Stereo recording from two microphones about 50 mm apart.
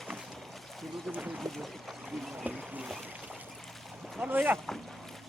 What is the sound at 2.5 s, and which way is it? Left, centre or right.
Speech, right.